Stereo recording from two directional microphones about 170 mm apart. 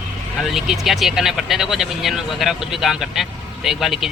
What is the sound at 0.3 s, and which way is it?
Speech, centre (ahead or behind).